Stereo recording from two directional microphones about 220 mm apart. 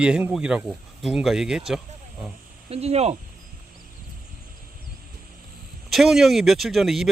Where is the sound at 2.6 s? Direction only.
30° right (ahead or behind).